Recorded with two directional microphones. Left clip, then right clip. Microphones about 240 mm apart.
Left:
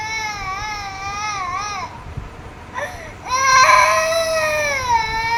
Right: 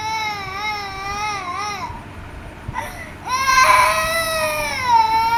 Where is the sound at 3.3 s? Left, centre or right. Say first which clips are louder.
Left 2 dB; centre.